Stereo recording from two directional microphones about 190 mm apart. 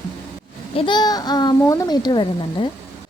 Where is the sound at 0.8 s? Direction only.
25° left (ahead or behind).